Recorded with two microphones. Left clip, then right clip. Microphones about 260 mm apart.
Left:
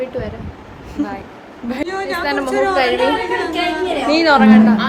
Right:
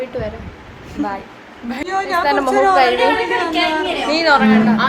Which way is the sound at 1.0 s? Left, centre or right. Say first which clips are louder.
Right 1 dB; centre.